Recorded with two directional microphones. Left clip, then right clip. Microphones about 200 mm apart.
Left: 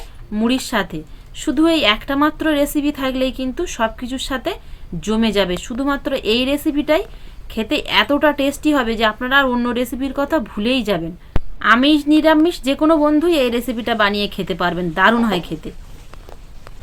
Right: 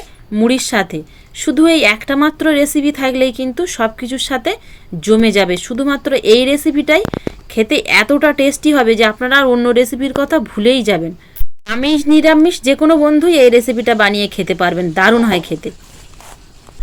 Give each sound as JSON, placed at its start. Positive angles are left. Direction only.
{"t": 0.3, "sound": "a woman's voice", "side_deg": -25}